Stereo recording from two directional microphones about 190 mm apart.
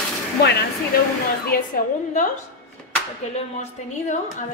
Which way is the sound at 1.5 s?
50° left (ahead or behind).